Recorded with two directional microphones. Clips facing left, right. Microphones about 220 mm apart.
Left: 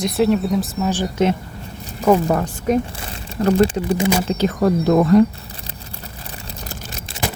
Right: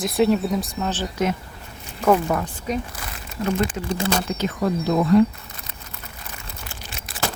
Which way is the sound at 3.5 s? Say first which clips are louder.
Left 8 dB; 30° left (ahead or behind).